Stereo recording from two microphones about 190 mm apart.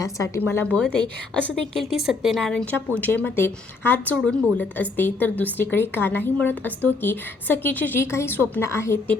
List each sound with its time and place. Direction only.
0.0 s a woman's voice: 15° left (ahead or behind)